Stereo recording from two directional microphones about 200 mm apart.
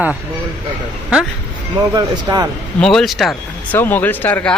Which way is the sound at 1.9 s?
20° right (ahead or behind).